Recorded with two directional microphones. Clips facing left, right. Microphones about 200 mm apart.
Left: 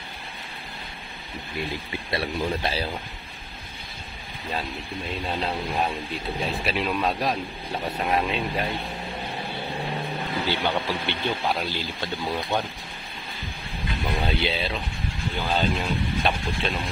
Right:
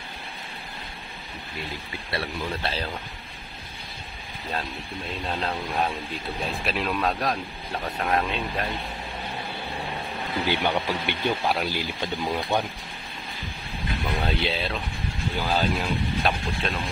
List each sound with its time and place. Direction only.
2.0 s speech: 15° left (ahead or behind)
5.2 s speech: 5° left (ahead or behind)
10.4 s speech: 15° right (ahead or behind)
14.0 s speech: centre (ahead or behind)